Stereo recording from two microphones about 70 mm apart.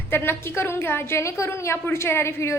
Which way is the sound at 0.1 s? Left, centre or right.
Left.